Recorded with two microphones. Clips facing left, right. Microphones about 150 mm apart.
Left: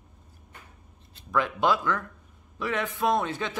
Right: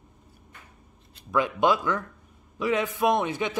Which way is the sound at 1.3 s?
15° right (ahead or behind).